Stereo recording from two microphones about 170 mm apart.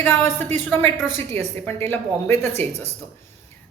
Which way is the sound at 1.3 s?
15° left (ahead or behind).